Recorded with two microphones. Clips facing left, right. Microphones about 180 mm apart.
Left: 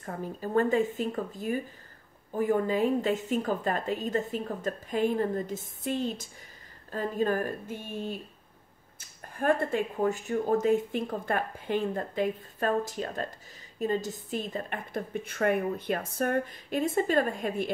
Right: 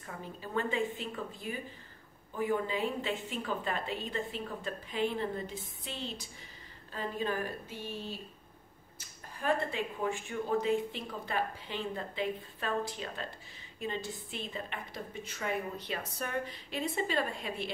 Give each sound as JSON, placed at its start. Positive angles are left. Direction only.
{"t": 0.0, "sound": "a woman's voice", "side_deg": 45}
{"t": 9.4, "sound": "a woman's voice", "side_deg": 50}